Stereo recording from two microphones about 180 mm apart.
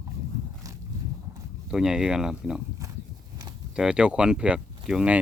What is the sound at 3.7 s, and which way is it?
Speech, 5° right (ahead or behind).